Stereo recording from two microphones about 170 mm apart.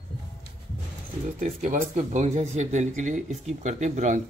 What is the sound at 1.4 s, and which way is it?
Speech, 45° right (ahead or behind).